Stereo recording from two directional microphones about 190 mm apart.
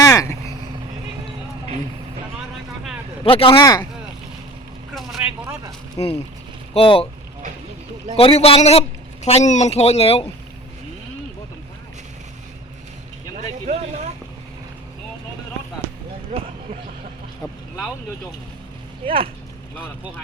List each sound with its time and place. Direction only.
0.0 s vehicle: 15° left (ahead or behind)
3.2 s speech: 30° left (ahead or behind)
4.9 s vehicle: centre (ahead or behind)
6.7 s speech: 30° left (ahead or behind)
8.1 s speech: 30° left (ahead or behind)
13.7 s vehicle: 40° right (ahead or behind)
19.0 s speech: 30° right (ahead or behind)